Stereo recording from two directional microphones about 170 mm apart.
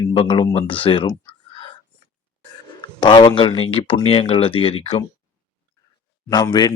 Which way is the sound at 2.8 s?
25° left (ahead or behind).